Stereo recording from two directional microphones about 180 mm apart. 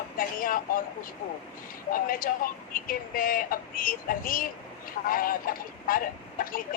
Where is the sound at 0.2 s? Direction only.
50° left (ahead or behind).